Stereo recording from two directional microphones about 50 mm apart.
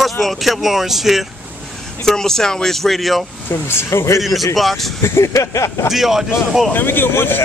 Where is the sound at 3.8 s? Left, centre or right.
Left.